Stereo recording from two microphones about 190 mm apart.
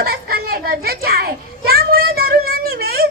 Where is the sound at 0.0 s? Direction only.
55° right (ahead or behind).